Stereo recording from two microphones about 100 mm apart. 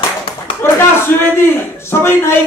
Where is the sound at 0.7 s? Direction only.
20° left (ahead or behind).